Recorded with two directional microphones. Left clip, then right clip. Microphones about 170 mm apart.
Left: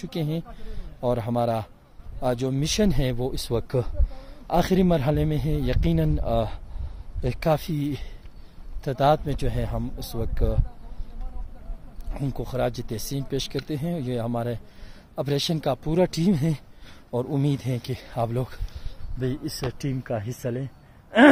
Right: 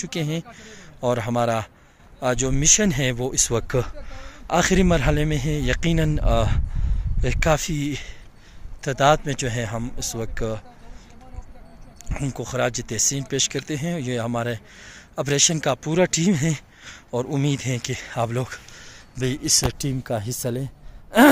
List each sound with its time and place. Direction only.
0.0 s speech: 5° left (ahead or behind)
12.1 s speech: centre (ahead or behind)
19.2 s speech: 30° right (ahead or behind)